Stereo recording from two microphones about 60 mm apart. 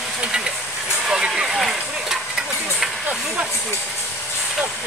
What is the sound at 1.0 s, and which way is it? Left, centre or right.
Vehicle, centre.